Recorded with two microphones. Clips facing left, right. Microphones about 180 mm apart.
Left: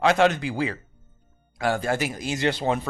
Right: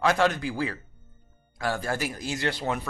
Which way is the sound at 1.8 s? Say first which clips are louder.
Left 4 dB; 20° left (ahead or behind).